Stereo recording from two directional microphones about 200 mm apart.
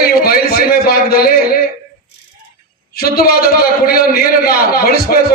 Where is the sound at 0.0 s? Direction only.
50° left (ahead or behind).